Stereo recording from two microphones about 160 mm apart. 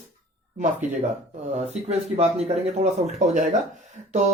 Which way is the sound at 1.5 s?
40° right (ahead or behind).